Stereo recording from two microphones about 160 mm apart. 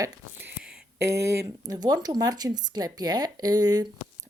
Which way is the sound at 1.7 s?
25° right (ahead or behind).